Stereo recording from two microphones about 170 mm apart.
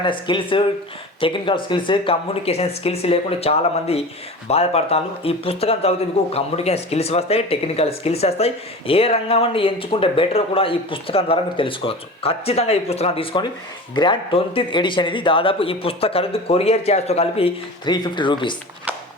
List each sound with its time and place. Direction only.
0.0 s speech: 30° left (ahead or behind)